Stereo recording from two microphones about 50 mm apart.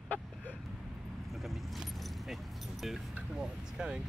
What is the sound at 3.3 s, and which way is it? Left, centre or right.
Speech, centre.